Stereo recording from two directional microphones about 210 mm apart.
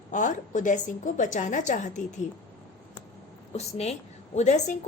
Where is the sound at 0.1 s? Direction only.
35° left (ahead or behind).